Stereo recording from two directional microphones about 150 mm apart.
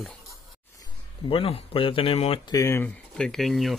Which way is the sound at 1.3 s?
40° left (ahead or behind).